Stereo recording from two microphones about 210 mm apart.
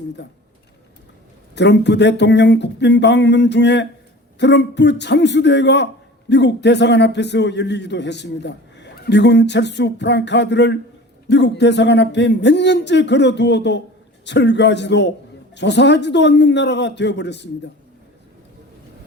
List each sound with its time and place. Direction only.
1.5 s a man's voice: 55° left (ahead or behind)